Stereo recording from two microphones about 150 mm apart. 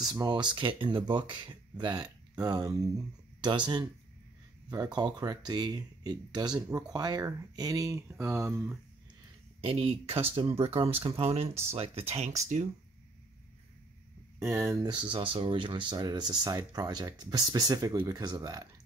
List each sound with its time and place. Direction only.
0.1 s speech: 30° right (ahead or behind)
4.9 s speech: 30° right (ahead or behind)
9.6 s speech: 40° right (ahead or behind)
14.4 s speech: 20° right (ahead or behind)